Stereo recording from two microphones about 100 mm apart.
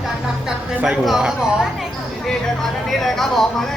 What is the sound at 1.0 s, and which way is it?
Speech, 5° right (ahead or behind).